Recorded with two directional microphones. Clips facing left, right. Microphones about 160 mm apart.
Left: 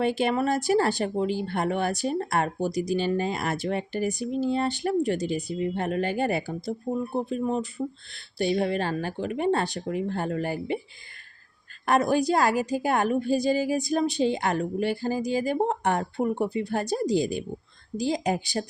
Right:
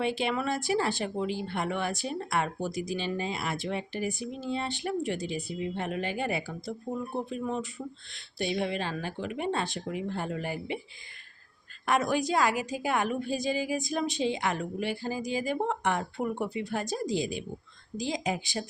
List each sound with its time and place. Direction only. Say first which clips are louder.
0.0 s a woman's voice: left 5 dB; 45° left (ahead or behind)
11.9 s a woman's voice: left 5 dB; 40° left (ahead or behind)